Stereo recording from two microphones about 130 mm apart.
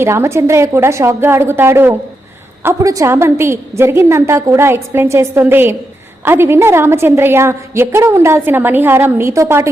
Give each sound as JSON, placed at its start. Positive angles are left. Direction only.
{"t": 0.0, "sound": "a woman's voice", "side_deg": -20}